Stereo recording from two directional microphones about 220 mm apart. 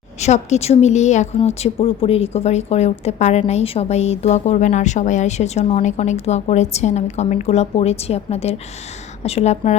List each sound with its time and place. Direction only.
0.2 s a woman's voice: 30° left (ahead or behind)